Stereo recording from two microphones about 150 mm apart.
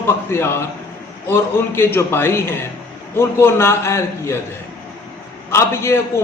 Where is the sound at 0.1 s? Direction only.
15° left (ahead or behind).